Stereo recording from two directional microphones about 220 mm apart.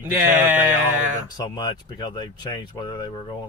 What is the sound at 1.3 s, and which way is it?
Speech, 20° left (ahead or behind).